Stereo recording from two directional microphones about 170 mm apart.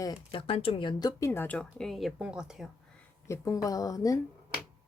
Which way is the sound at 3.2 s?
15° left (ahead or behind).